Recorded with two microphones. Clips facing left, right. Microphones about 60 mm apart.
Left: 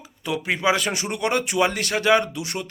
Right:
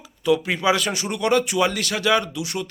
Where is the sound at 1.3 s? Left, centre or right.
Left.